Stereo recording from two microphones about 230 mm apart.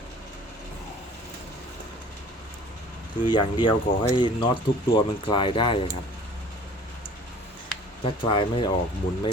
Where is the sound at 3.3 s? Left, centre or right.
Centre.